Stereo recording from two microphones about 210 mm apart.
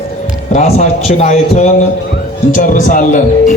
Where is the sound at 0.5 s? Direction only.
35° left (ahead or behind).